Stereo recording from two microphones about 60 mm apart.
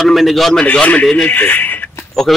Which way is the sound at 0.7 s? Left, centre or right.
Left.